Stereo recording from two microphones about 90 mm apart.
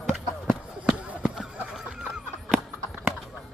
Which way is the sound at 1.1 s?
10° right (ahead or behind).